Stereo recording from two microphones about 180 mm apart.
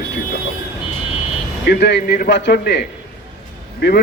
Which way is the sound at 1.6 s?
65° left (ahead or behind).